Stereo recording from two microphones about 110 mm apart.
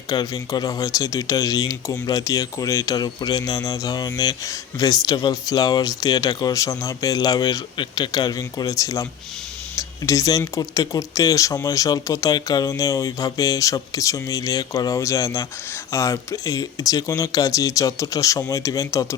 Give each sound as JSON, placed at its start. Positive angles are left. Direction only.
{"t": 0.1, "sound": "speech", "side_deg": 40}